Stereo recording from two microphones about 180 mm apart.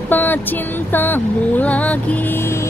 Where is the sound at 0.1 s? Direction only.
10° left (ahead or behind).